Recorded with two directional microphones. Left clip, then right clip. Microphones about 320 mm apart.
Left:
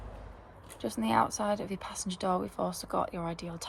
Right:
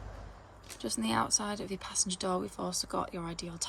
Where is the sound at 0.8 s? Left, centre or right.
Centre.